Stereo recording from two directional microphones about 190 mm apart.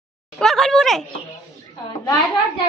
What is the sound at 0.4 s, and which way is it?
Speech, centre (ahead or behind).